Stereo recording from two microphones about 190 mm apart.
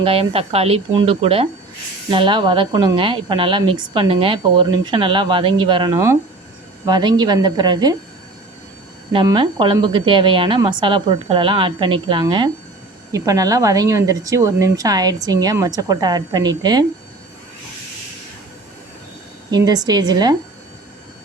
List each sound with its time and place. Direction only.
0.0 s a woman's voice: 30° right (ahead or behind)
9.2 s a woman's voice: 25° right (ahead or behind)
19.5 s a woman's voice: 20° right (ahead or behind)